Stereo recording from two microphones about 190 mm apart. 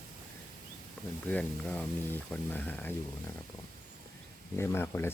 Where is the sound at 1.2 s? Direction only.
5° left (ahead or behind).